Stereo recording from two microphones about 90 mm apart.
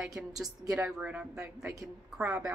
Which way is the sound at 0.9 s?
15° right (ahead or behind).